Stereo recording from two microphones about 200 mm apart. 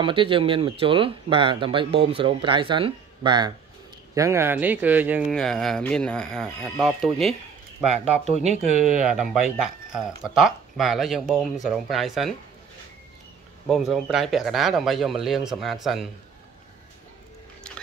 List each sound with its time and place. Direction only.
0.0 s a man's voice: 25° right (ahead or behind); by 5.3 s 10° right (ahead or behind)
5.3 s speech: 5° left (ahead or behind)
7.9 s speech: 35° right (ahead or behind)
9.0 s speech: centre (ahead or behind)
13.7 s speech: centre (ahead or behind)